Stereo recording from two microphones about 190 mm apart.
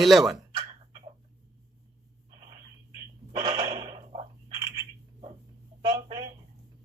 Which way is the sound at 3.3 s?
20° right (ahead or behind).